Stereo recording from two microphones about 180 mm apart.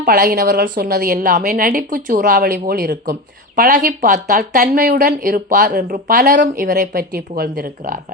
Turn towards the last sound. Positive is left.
turn(degrees=-55)  # may be behind; listen again after turning